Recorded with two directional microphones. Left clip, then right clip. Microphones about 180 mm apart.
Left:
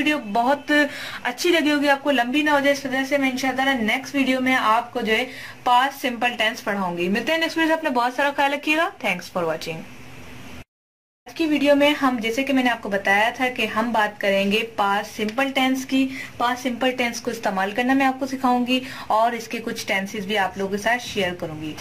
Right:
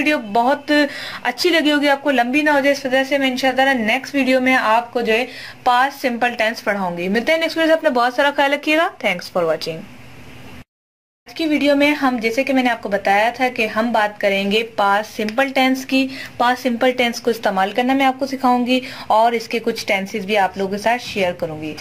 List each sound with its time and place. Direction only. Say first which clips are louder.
0.0 s speech: right 4 dB; 30° right (ahead or behind)
11.3 s speech: right 2 dB; 30° right (ahead or behind)